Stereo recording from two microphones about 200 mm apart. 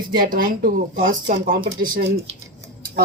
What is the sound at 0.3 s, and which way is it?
A woman's voice, 45° right (ahead or behind).